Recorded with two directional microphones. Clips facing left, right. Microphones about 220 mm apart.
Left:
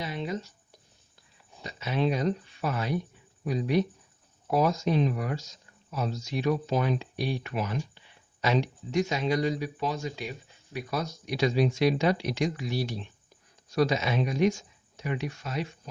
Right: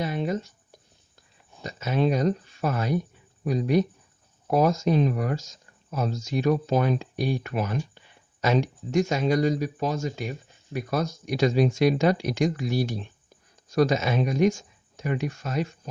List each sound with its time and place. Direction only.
0.0 s writing: 50° right (ahead or behind)
1.6 s speech: 45° right (ahead or behind)